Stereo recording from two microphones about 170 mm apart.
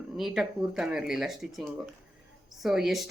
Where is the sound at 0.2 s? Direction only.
Centre (ahead or behind).